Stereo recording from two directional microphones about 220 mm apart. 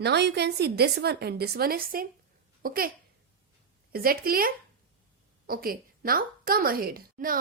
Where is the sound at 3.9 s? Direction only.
40° right (ahead or behind).